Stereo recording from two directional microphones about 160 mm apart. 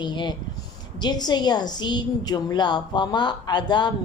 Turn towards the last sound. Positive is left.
turn(degrees=25)  # may be behind; listen again after turning